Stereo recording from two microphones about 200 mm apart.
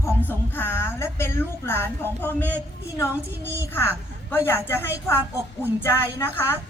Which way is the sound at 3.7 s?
10° left (ahead or behind).